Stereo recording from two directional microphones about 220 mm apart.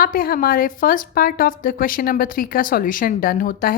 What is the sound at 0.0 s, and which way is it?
A woman's voice, 40° left (ahead or behind).